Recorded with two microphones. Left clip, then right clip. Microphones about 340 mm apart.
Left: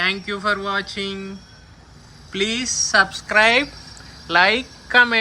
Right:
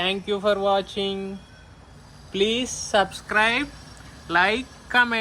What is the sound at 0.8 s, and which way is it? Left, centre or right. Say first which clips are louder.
Speech: even; centre.